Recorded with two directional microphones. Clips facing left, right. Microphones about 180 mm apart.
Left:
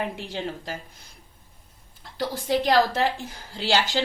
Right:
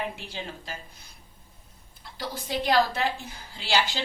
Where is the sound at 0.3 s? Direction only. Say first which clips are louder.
Left 6 dB; 45° left (ahead or behind).